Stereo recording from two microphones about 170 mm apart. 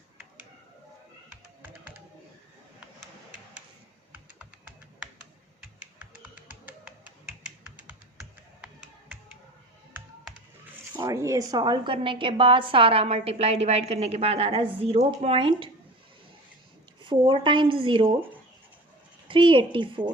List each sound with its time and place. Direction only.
6.2 s computer keyboard: 10° right (ahead or behind)
10.9 s a woman's voice: 15° right (ahead or behind)
17.0 s speech: 30° right (ahead or behind)
19.3 s speech: 30° right (ahead or behind)